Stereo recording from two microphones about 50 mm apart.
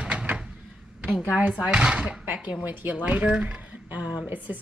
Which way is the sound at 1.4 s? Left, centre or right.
Right.